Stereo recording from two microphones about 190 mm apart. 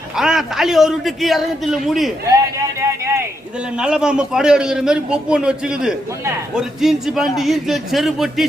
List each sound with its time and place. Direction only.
0.2 s a man's voice: centre (ahead or behind)
2.3 s a sound: 15° right (ahead or behind)
3.8 s a man's voice: 5° right (ahead or behind)